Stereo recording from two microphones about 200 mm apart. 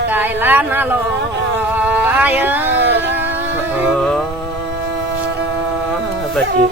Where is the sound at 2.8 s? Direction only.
60° right (ahead or behind).